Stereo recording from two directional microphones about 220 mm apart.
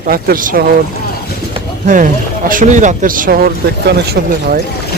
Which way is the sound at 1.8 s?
35° right (ahead or behind).